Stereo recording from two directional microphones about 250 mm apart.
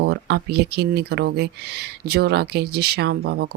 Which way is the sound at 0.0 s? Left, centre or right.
Right.